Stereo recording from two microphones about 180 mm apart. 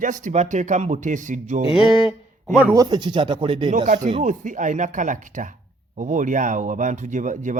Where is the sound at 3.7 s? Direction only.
45° right (ahead or behind).